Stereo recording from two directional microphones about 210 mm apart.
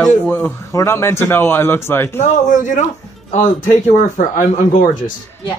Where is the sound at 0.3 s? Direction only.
10° left (ahead or behind).